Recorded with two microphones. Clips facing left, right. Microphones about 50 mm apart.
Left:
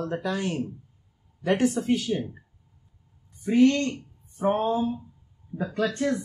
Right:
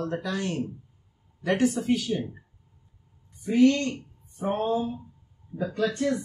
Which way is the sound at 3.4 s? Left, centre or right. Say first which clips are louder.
Left 1 dB; left.